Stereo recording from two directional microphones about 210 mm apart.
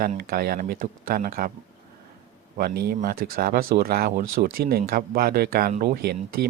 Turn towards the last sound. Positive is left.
turn(degrees=-50)  # may be behind; listen again after turning